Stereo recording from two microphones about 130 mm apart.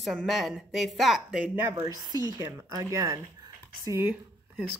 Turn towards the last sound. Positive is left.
turn(degrees=-15)  # may be behind; listen again after turning